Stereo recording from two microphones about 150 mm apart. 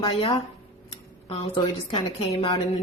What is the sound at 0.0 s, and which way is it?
Speech, 35° left (ahead or behind).